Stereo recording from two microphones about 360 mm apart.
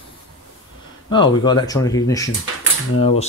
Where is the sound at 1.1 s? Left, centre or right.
Centre.